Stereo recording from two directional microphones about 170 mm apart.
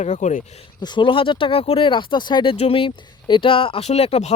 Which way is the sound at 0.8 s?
30° left (ahead or behind).